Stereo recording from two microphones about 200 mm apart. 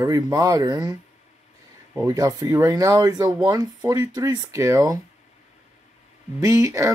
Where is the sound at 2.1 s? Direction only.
20° right (ahead or behind).